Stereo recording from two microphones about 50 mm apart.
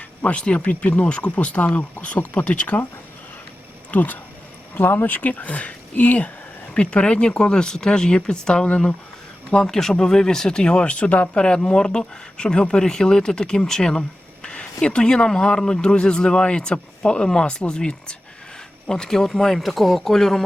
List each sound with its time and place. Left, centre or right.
0.3 s speech: left
3.9 s speech: left
4.8 s speech: left
9.6 s speech: centre; by 11.3 s left
11.3 s speech: centre